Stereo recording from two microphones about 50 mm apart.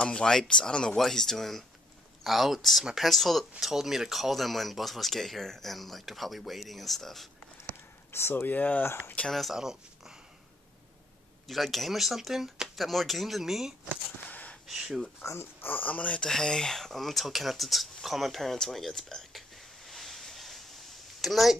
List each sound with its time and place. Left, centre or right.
0.0 s speech: centre
8.1 s speech: left
8.5 s speech: left
8.8 s speech: left
9.3 s speech: centre
9.6 s speech: centre
11.4 s speech: centre
14.2 s a sound: left
14.7 s speech: centre
15.6 s speech: left
16.2 s speech: centre
18.0 s a sound: centre